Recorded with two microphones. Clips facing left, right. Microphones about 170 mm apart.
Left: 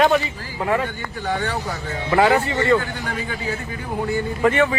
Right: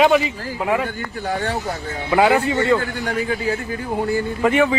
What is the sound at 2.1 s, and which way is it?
Speech, 15° right (ahead or behind).